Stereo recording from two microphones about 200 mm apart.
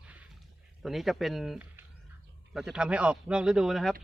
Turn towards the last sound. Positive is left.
turn(degrees=0)  # may be behind; listen again after turning